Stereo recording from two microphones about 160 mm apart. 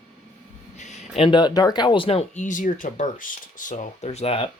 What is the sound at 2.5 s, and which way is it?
Speech, 55° left (ahead or behind).